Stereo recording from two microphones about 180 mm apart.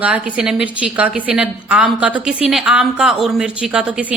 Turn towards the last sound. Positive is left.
turn(degrees=-5)  # may be behind; listen again after turning